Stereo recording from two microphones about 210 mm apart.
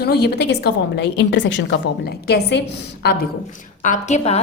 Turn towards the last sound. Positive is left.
turn(degrees=30)  # may be behind; listen again after turning